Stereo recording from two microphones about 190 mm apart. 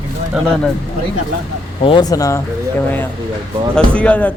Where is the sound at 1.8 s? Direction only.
25° left (ahead or behind).